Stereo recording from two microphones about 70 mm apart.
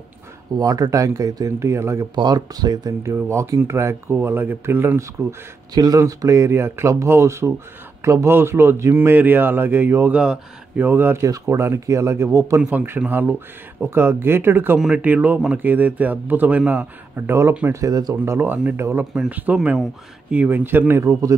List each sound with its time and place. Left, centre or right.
0.6 s speech: right
2.1 s speech: right
3.3 s speech: right
5.8 s speech: right
10.1 s speech: centre
10.8 s speech: right
11.2 s speech: right
11.5 s speech: right
13.1 s a man's voice: right
17.3 s speech: right
17.7 s speech: right
18.3 s speech: right
19.1 s a man's voice: centre
21.0 s speech: right